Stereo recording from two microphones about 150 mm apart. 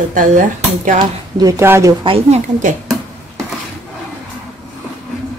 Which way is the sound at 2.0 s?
35° right (ahead or behind).